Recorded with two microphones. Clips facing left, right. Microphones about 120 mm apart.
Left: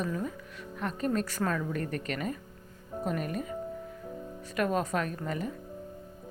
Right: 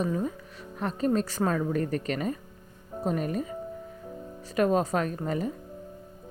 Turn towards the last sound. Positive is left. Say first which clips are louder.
# right 4 dB
turn(degrees=-35)  # may be behind; listen again after turning